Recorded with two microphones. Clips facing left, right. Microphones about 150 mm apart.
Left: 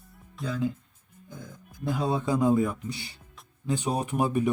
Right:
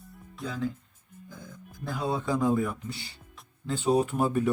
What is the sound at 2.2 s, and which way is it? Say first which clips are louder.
Speech: left 3 dB; 15° left (ahead or behind).